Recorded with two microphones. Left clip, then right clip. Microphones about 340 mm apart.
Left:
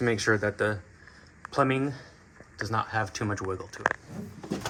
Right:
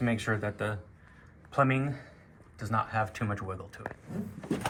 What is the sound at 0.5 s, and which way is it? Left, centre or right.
Speech, left.